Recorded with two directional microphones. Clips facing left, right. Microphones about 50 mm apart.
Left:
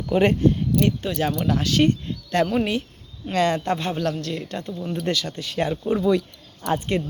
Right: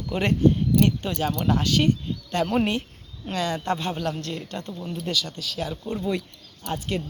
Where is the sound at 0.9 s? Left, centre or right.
Centre.